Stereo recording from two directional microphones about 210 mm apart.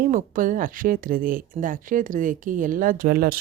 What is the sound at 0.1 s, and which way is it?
Speech, 40° right (ahead or behind).